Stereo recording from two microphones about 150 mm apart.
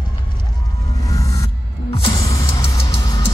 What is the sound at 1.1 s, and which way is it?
Music, 20° left (ahead or behind).